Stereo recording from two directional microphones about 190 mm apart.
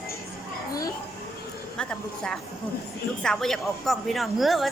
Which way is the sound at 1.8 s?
5° left (ahead or behind).